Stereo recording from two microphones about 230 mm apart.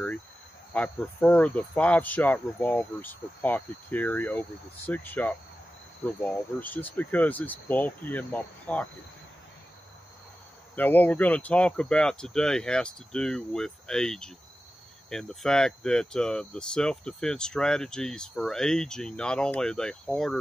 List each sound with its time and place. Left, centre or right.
0.7 s speech: centre
10.8 s speech: centre